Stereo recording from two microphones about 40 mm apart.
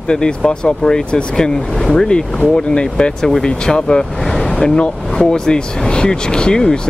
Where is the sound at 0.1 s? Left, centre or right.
Centre.